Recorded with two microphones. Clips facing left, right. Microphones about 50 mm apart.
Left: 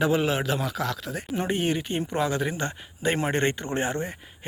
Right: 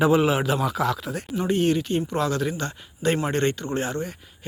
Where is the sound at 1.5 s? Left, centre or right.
Centre.